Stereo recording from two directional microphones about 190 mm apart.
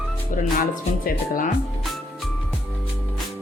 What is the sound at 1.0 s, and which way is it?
Speech, 50° left (ahead or behind).